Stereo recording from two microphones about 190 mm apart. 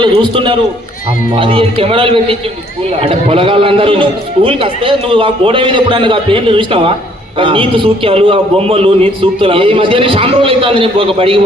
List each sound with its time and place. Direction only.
0.0 s a man's voice: 25° right (ahead or behind)